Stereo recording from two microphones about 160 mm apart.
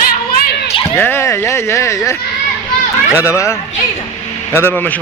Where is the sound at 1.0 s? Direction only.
15° left (ahead or behind).